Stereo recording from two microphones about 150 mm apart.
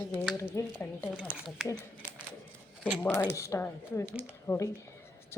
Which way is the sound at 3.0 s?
20° left (ahead or behind).